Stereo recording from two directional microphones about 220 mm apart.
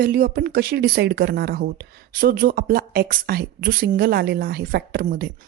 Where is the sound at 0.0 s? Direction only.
40° right (ahead or behind).